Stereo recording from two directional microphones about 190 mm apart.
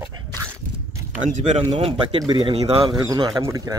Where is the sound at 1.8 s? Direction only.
25° right (ahead or behind).